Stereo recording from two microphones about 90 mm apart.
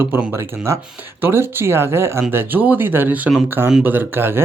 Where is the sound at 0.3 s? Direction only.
30° right (ahead or behind).